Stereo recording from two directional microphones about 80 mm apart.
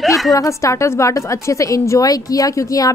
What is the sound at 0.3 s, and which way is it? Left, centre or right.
A woman's voice, left.